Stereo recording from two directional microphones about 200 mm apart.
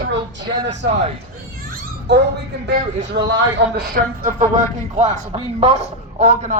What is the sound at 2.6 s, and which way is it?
Speech, 60° right (ahead or behind).